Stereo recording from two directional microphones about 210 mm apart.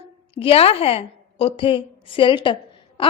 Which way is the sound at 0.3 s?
25° left (ahead or behind).